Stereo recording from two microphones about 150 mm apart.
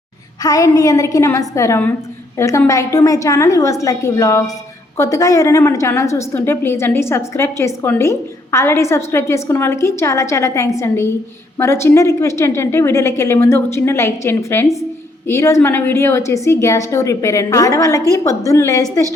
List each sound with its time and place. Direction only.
0.4 s a woman's voice: 25° left (ahead or behind)